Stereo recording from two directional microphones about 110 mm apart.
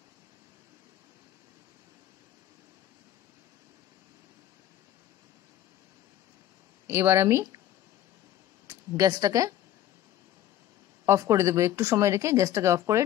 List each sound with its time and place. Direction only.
6.9 s speech: 20° right (ahead or behind)
8.6 s speech: 30° right (ahead or behind)
11.1 s speech: 25° right (ahead or behind)